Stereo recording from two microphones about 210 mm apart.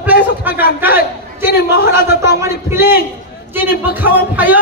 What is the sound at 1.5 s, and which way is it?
Speech, 45° left (ahead or behind).